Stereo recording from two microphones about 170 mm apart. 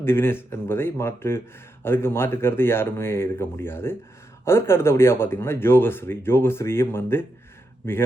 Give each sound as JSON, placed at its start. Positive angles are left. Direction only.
{"t": 0.0, "sound": "speech", "side_deg": 15}